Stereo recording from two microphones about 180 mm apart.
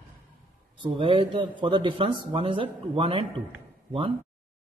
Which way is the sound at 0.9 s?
30° right (ahead or behind).